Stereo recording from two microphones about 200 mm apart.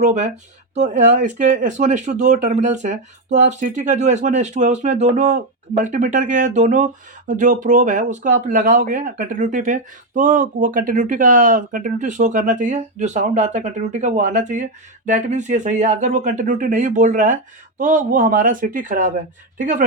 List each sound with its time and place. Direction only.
0.0 s speech: 35° right (ahead or behind)